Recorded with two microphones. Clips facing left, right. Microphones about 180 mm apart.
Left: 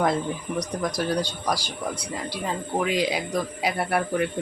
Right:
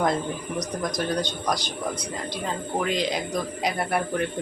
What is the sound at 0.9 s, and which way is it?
Speech, 10° left (ahead or behind).